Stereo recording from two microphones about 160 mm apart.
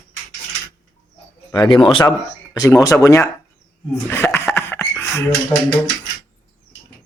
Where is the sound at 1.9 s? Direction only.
30° left (ahead or behind).